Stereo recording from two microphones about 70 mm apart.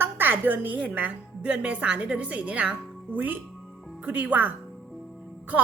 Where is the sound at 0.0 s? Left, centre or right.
Right.